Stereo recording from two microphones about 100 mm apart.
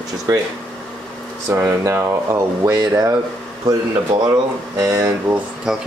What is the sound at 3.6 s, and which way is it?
Speech, 45° right (ahead or behind).